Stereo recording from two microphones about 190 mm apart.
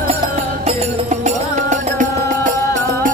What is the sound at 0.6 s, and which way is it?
Music, 35° right (ahead or behind).